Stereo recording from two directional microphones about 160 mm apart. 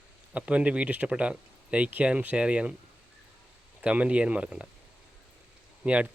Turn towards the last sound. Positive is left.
turn(degrees=-10)  # may be behind; listen again after turning